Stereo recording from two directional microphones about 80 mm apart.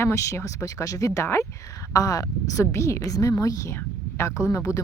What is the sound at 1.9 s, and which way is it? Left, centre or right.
Speech, left.